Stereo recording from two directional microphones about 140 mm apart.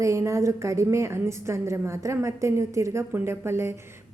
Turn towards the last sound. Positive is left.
turn(degrees=-20)  # may be behind; listen again after turning